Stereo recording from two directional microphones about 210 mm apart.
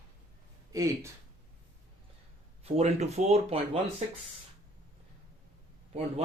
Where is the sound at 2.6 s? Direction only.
30° right (ahead or behind).